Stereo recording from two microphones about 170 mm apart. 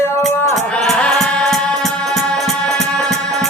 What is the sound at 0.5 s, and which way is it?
Music, centre (ahead or behind).